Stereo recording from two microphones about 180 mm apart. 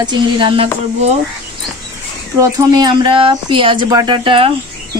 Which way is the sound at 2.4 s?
20° right (ahead or behind).